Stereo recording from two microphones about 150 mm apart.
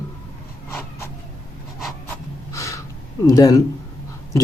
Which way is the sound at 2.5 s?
20° left (ahead or behind).